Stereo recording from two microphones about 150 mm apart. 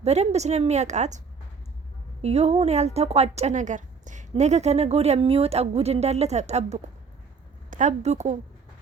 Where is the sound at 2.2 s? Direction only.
45° right (ahead or behind).